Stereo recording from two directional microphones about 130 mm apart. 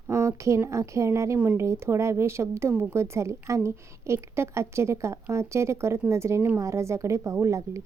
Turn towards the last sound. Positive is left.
turn(degrees=-25)  # may be behind; listen again after turning